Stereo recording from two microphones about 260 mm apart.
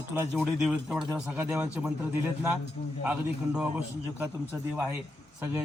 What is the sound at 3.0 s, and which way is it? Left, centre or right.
Speech, centre.